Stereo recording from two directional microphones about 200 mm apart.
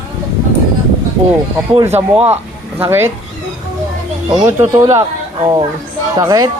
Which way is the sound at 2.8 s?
10° right (ahead or behind).